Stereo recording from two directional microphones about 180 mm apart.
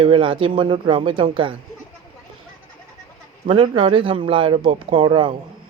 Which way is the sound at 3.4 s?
30° right (ahead or behind).